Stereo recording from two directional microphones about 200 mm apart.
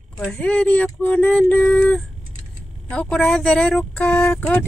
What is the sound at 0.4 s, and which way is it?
Speech, 5° left (ahead or behind).